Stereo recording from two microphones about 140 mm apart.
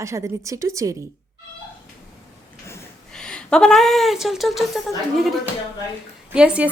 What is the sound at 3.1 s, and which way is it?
Speech, 5° left (ahead or behind).